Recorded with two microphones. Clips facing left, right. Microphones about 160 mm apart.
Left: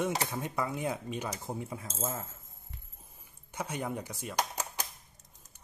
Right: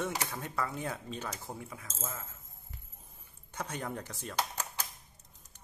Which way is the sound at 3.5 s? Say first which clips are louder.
Left 3 dB; 10° left (ahead or behind).